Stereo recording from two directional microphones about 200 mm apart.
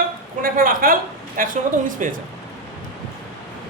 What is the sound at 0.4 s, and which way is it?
A woman's voice, 45° right (ahead or behind).